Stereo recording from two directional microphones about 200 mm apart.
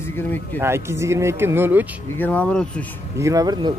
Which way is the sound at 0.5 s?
15° right (ahead or behind).